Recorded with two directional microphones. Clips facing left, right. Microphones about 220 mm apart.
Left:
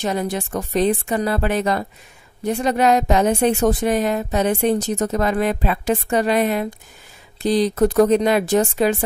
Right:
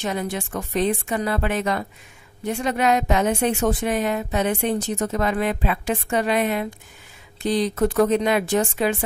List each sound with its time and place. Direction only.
0.0 s a woman's voice: 35° left (ahead or behind)